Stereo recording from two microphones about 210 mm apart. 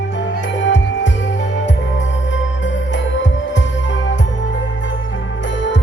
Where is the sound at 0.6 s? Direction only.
60° left (ahead or behind).